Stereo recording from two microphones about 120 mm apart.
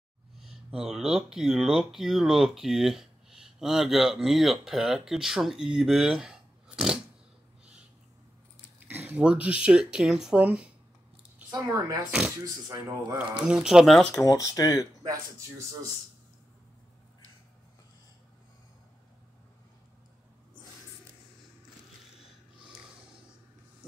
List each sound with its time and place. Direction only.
0.4 s speech: 5° right (ahead or behind)
8.7 s speech: 15° right (ahead or behind)
11.5 s speech: 30° right (ahead or behind)
13.2 s speech: 10° right (ahead or behind)
14.2 s speech: 30° left (ahead or behind)